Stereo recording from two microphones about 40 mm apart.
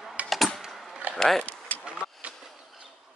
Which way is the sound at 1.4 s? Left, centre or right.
Left.